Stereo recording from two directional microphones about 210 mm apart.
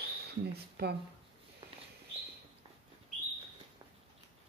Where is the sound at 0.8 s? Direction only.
50° right (ahead or behind).